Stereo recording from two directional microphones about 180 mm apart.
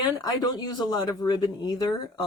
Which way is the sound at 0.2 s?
20° left (ahead or behind).